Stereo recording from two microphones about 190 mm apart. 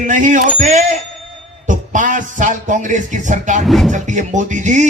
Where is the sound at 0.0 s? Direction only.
40° right (ahead or behind).